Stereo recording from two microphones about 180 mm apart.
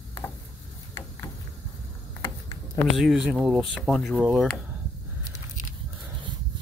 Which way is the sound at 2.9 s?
Centre (ahead or behind).